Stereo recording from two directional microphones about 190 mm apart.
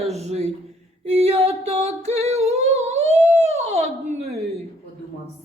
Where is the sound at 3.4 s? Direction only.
35° right (ahead or behind).